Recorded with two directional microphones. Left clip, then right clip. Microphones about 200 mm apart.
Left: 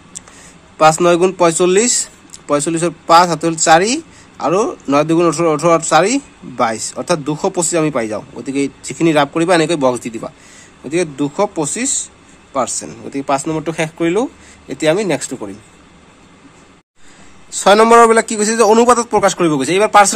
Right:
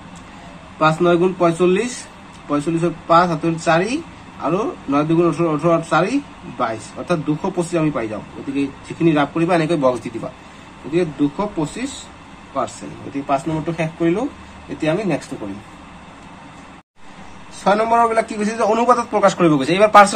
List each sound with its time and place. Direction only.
0.7 s a man's voice: 55° left (ahead or behind)
13.1 s a man's voice: 55° left (ahead or behind)
17.6 s speech: 60° left (ahead or behind); by 20.2 s 40° left (ahead or behind)